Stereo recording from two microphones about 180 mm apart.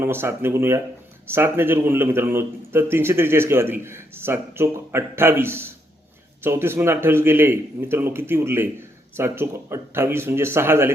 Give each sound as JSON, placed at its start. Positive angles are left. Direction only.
{"t": 0.0, "sound": "a man's voice", "side_deg": -15}